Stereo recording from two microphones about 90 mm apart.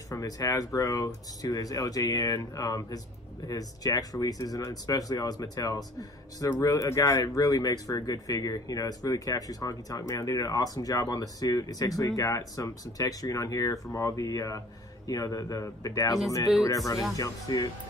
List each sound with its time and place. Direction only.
0.1 s speech: 40° left (ahead or behind)